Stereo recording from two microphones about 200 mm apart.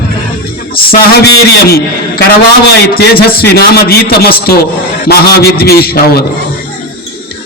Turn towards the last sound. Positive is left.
turn(degrees=50)  # may be behind; listen again after turning